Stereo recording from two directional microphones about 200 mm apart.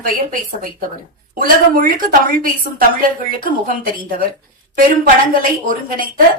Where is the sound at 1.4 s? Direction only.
45° right (ahead or behind).